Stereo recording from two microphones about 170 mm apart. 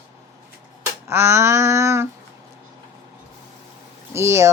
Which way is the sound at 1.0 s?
15° right (ahead or behind).